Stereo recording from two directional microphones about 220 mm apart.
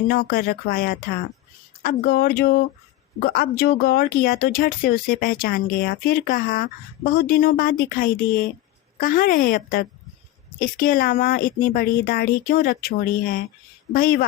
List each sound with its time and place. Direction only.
0.1 s speech: 40° left (ahead or behind)